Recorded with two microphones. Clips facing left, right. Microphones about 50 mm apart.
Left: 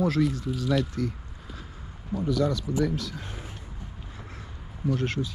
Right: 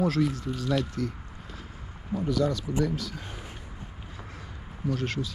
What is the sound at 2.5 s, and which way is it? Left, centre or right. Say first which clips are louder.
Speech: left 1 dB; right.